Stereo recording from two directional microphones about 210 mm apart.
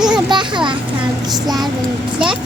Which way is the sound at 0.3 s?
20° right (ahead or behind).